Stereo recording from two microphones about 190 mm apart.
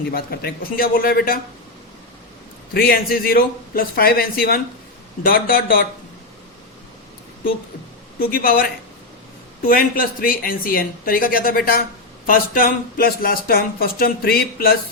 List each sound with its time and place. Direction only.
0.1 s speech: 55° left (ahead or behind)
2.7 s speech: 50° left (ahead or behind)
8.2 s speech: 50° left (ahead or behind)